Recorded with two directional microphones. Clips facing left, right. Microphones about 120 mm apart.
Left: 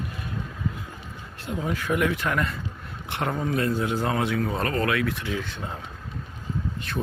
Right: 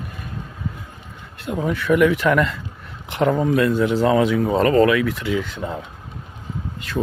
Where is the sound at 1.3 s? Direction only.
60° right (ahead or behind); by 5.8 s 90° right.